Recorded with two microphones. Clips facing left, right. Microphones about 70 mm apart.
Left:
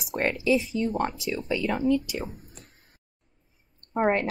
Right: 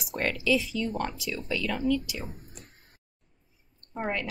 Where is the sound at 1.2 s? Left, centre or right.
Left.